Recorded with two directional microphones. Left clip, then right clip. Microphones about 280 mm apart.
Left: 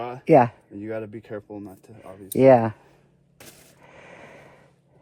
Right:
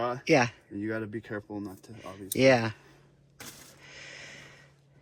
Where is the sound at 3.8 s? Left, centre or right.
Centre.